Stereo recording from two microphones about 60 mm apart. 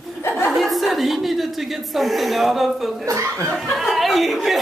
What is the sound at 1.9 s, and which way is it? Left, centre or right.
Speech, centre.